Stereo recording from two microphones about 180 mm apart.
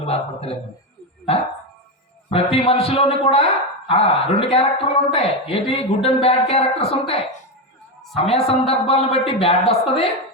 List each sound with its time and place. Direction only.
0.0 s a man's voice: 35° left (ahead or behind)
2.3 s a man's voice: 30° left (ahead or behind)
8.1 s a man's voice: 35° left (ahead or behind)